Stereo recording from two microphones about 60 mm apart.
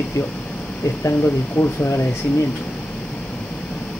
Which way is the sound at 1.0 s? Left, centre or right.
Left.